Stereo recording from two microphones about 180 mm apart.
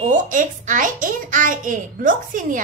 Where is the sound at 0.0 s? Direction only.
45° right (ahead or behind).